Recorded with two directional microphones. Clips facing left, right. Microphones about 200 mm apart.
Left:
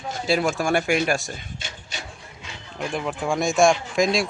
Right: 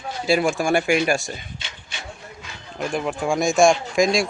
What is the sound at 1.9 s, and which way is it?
Wood, 40° left (ahead or behind).